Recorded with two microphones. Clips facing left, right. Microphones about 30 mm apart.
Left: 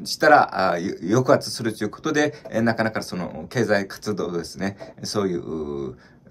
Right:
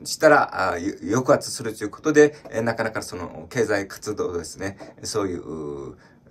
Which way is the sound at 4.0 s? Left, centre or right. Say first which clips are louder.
Even; left.